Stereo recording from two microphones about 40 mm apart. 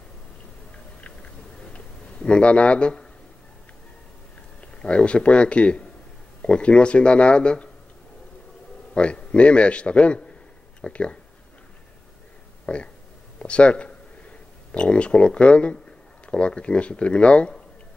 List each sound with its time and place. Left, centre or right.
1.7 s a sound: left
4.6 s a man's voice: left
8.9 s a man's voice: left
12.6 s a man's voice: left